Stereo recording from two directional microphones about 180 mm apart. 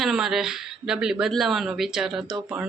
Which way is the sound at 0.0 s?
Centre (ahead or behind).